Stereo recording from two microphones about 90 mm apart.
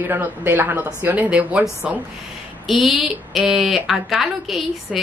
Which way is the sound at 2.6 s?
Centre (ahead or behind).